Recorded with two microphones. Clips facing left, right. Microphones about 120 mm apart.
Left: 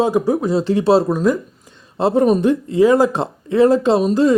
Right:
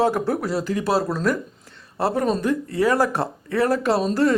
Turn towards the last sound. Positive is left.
turn(degrees=15)  # may be behind; listen again after turning